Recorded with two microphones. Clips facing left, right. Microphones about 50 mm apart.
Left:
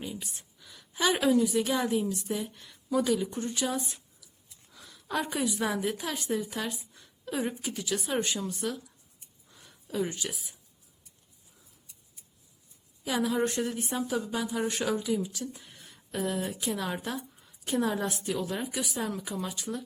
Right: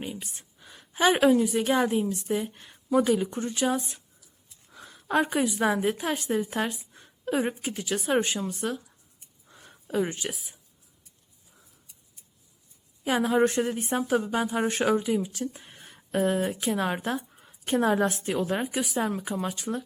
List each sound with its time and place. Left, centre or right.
0.0 s a woman's voice: right
9.5 s a sound: right
13.1 s speech: right